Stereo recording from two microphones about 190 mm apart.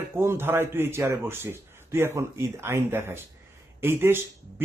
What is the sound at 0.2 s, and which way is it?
A man's voice, 10° right (ahead or behind).